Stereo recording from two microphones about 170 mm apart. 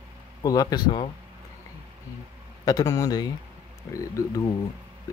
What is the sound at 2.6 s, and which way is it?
Speech, 20° left (ahead or behind).